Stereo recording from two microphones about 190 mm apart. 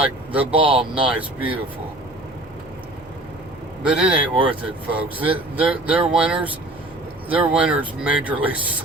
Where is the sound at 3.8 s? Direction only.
5° right (ahead or behind).